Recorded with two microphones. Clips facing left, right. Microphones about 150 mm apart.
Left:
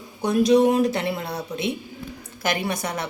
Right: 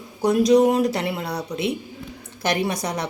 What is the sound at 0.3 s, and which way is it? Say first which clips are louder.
Speech: right 1 dB; 35° right (ahead or behind).